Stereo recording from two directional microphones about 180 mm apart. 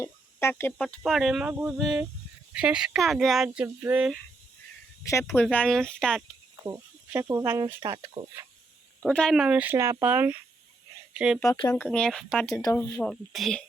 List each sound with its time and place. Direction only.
0.0 s speech: 15° left (ahead or behind); by 4.2 s 5° right (ahead or behind)
5.0 s speech: 15° left (ahead or behind)
6.7 s speech: 15° right (ahead or behind)
9.0 s speech: 5° left (ahead or behind)
11.5 s speech: 25° left (ahead or behind)
11.8 s speech: 5° left (ahead or behind)
12.5 s speech: 15° left (ahead or behind)